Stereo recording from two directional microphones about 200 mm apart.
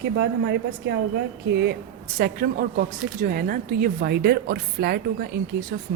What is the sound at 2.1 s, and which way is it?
Speech, 50° right (ahead or behind).